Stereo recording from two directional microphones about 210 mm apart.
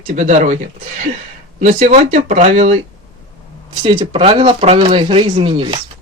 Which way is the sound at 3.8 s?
20° right (ahead or behind).